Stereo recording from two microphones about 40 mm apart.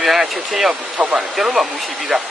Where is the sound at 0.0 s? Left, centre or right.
Centre.